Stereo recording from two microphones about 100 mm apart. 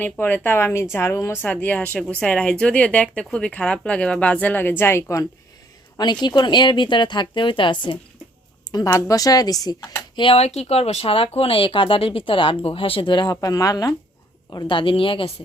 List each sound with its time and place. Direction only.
0.0 s a woman's voice: 20° left (ahead or behind)
6.2 s a woman's voice: 50° left (ahead or behind)
8.9 s speech: 35° left (ahead or behind)
10.2 s speech: 75° left (ahead or behind); by 13.9 s 35° left (ahead or behind)
14.5 s speech: 50° left (ahead or behind)